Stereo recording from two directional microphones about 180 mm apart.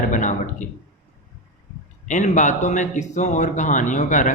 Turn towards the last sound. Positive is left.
turn(degrees=45)  # may be behind; listen again after turning